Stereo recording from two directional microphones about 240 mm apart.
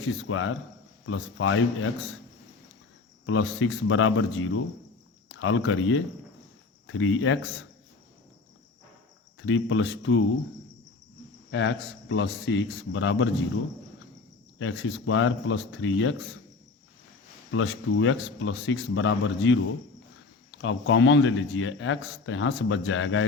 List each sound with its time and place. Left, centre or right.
0.0 s speech: left
3.2 s a man's voice: left
9.5 s a man's voice: left
11.5 s a man's voice: left
14.6 s a man's voice: left
17.5 s a man's voice: left
20.6 s a man's voice: left